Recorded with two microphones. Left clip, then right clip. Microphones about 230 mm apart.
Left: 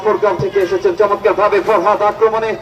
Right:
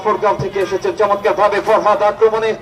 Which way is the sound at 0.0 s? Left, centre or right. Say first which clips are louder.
Left 1 dB; right.